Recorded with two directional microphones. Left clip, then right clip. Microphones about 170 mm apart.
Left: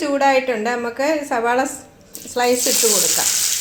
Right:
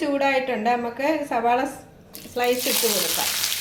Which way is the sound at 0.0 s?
35° left (ahead or behind).